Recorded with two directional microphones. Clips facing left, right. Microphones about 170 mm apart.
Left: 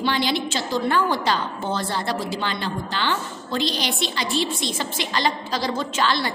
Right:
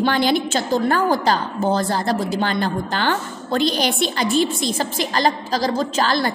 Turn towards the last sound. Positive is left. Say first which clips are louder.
# right 3 dB
turn(degrees=-45)  # may be behind; listen again after turning